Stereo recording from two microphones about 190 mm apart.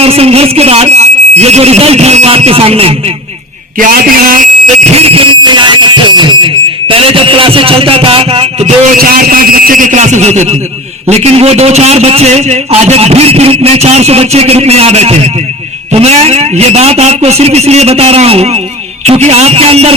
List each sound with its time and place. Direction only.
0.0 s a man's voice: 30° right (ahead or behind)
3.8 s a sound: 50° right (ahead or behind); by 8.7 s 30° right (ahead or behind)
9.0 s a man's voice: 50° right (ahead or behind); by 19.9 s 30° right (ahead or behind)